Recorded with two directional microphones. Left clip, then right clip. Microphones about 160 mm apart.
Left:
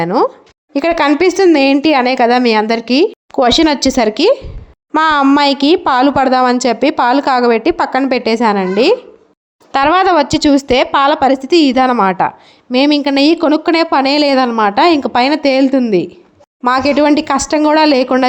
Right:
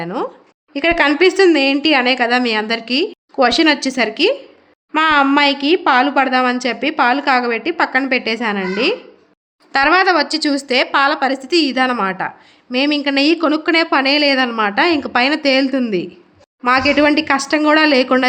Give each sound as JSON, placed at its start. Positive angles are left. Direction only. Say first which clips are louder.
{"t": 0.7, "sound": "a woman's voice", "louder": "left 2 dB", "side_deg": 35}